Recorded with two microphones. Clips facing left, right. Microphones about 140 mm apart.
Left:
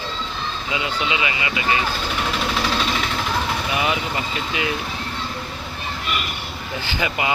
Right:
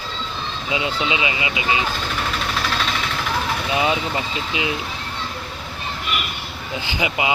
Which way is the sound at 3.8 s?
25° right (ahead or behind).